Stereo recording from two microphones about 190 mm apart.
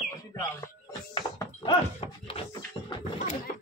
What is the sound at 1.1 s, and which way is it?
Goat, 25° left (ahead or behind).